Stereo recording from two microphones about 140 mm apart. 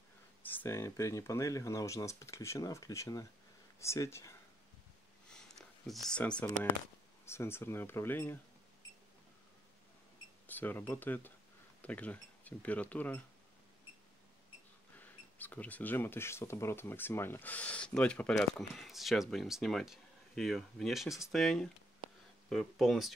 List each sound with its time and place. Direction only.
0.4 s speech: 15° left (ahead or behind)
5.3 s a sound: 5° left (ahead or behind)
7.2 s speech: 20° left (ahead or behind)
10.4 s speech: 15° left (ahead or behind)
15.0 s speech: 10° left (ahead or behind)